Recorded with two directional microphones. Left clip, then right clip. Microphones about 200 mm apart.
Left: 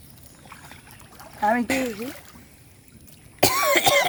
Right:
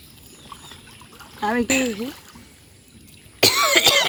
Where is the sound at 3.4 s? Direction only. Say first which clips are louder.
Right 3 dB; 50° left (ahead or behind).